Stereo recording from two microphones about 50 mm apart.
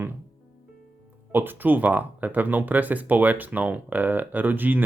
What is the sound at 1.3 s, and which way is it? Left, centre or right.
Speech, right.